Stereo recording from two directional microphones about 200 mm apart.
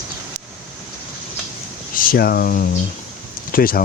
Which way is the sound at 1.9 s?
45° left (ahead or behind).